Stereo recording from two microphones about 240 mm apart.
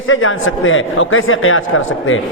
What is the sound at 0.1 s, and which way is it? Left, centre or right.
A man's voice, left.